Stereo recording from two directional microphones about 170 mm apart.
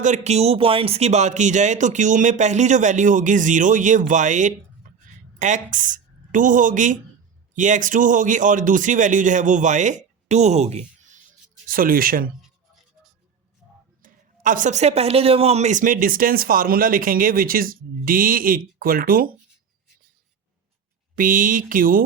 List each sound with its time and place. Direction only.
0.0 s a woman's voice: 45° right (ahead or behind)
11.7 s speech: 55° right (ahead or behind)
14.0 s speech: 50° right (ahead or behind)
21.2 s speech: 55° right (ahead or behind)